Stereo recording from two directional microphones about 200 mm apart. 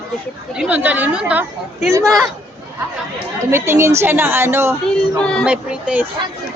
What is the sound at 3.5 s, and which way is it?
Speech, 15° right (ahead or behind).